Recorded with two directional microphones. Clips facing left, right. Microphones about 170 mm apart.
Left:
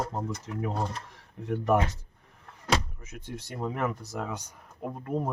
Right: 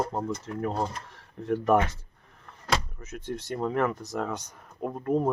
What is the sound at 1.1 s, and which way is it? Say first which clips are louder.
Speech: right 8 dB; 15° left (ahead or behind).